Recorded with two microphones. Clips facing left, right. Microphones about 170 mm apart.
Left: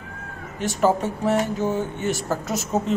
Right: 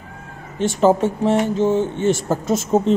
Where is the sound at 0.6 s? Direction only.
25° right (ahead or behind).